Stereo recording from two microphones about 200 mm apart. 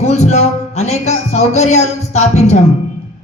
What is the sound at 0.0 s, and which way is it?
Speech, 35° left (ahead or behind).